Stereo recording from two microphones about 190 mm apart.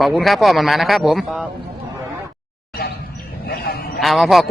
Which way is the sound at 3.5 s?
55° left (ahead or behind).